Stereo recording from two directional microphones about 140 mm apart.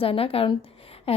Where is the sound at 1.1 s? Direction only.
45° left (ahead or behind).